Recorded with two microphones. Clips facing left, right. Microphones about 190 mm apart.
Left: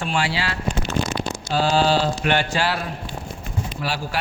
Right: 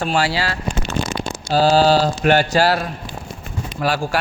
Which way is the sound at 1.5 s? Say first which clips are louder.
Right 5 dB; 35° right (ahead or behind).